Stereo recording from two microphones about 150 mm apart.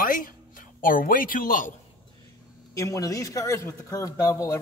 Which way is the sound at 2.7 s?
20° left (ahead or behind).